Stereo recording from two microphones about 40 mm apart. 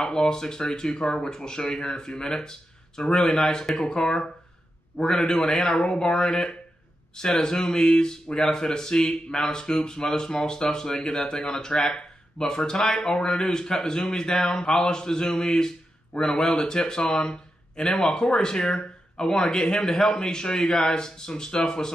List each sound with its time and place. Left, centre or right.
0.0 s speech: centre